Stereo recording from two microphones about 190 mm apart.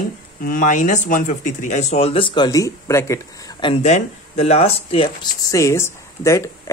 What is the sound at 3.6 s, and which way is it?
Speech, 35° left (ahead or behind).